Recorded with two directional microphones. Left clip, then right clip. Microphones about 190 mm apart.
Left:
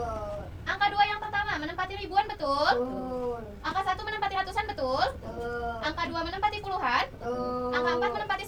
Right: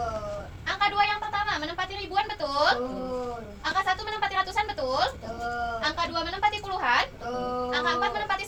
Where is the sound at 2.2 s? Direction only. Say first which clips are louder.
Right 1 dB; 15° right (ahead or behind).